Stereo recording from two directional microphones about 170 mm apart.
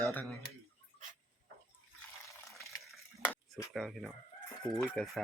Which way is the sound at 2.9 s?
5° right (ahead or behind).